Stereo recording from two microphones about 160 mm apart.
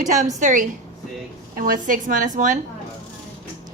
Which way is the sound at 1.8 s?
55° right (ahead or behind).